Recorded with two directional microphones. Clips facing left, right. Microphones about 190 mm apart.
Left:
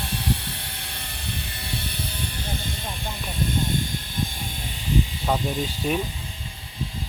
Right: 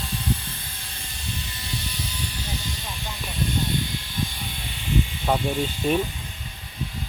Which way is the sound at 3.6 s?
50° left (ahead or behind).